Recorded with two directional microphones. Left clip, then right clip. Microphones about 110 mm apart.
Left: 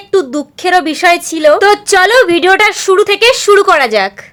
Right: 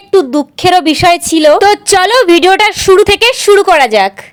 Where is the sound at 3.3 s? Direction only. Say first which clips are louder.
Right 1 dB; 30° right (ahead or behind).